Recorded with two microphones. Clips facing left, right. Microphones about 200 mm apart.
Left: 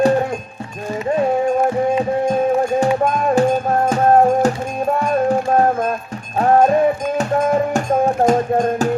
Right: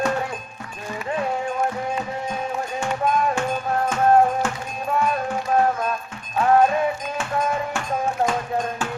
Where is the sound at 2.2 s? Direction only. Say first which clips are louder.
Left 11 dB; 40° left (ahead or behind).